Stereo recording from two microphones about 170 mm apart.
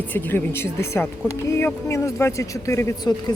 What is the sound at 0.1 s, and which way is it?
Speech, 10° left (ahead or behind).